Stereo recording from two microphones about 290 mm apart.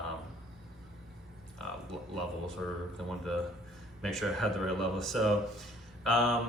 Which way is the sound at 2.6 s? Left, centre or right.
Centre.